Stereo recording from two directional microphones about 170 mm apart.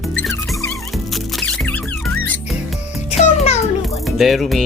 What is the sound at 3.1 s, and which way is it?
Music, 40° left (ahead or behind).